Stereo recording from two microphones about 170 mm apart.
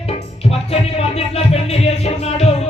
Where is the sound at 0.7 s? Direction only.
35° left (ahead or behind).